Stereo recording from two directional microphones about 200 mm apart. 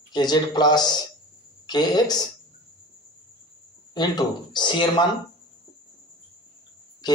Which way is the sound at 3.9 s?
20° left (ahead or behind).